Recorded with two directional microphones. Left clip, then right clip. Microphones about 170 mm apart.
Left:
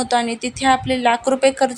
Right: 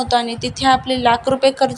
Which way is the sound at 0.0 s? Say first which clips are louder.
Right 1 dB; 15° left (ahead or behind).